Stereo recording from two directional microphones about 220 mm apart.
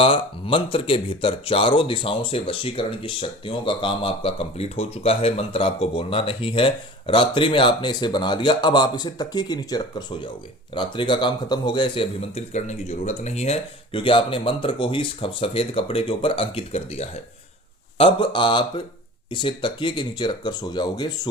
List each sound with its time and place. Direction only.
0.0 s speech: 25° left (ahead or behind)